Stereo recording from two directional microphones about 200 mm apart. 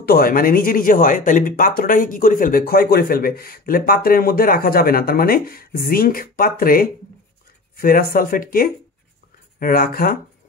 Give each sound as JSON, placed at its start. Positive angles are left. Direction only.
{"t": 0.0, "sound": "speech", "side_deg": 50}